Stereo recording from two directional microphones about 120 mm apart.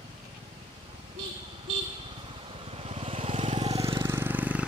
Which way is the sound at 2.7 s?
50° right (ahead or behind).